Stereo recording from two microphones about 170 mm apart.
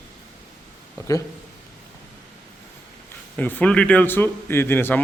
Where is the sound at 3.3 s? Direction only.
10° left (ahead or behind).